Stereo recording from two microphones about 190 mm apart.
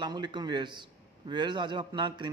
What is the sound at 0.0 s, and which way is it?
A man's voice, 25° right (ahead or behind).